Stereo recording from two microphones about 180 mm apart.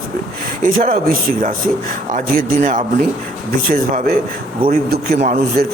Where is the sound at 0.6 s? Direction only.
50° right (ahead or behind).